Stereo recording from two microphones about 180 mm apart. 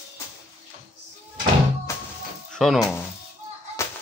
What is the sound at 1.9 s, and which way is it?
Music, 15° left (ahead or behind).